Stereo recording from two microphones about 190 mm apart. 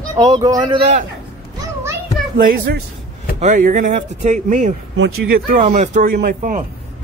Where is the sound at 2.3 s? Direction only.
50° right (ahead or behind).